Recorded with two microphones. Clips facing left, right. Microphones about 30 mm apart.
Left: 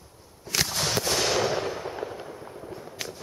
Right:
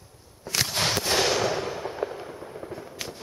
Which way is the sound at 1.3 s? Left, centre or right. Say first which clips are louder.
Even; centre.